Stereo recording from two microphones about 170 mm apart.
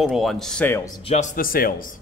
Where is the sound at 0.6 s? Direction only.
15° left (ahead or behind).